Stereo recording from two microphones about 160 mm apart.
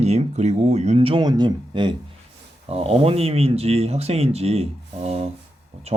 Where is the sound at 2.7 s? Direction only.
40° right (ahead or behind).